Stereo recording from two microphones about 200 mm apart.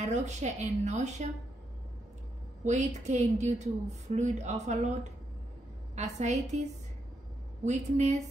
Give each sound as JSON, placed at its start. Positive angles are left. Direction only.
{"t": 0.0, "sound": "a woman's voice", "side_deg": -35}
{"t": 2.6, "sound": "a woman's voice", "side_deg": -35}
{"t": 5.9, "sound": "a woman's voice", "side_deg": -35}
{"t": 7.6, "sound": "a woman's voice", "side_deg": -35}